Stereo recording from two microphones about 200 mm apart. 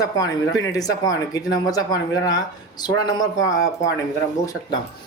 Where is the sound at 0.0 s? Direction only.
15° left (ahead or behind).